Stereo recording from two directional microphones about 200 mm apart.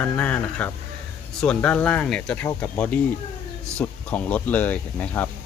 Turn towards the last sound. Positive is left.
turn(degrees=10)  # may be behind; listen again after turning